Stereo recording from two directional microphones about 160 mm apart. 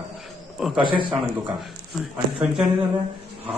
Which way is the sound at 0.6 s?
Centre (ahead or behind).